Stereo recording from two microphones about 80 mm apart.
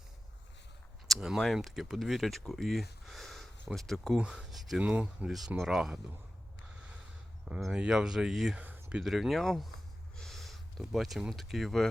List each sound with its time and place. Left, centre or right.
1.0 s a sound: centre
1.5 s speech: centre
4.8 s speech: centre
5.6 s speech: centre
7.6 s speech: centre
8.5 s a sound: centre
9.0 s speech: centre
10.2 s a sound: centre
11.2 s speech: centre